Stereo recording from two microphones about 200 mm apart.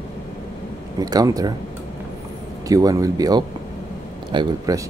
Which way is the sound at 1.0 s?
20° right (ahead or behind).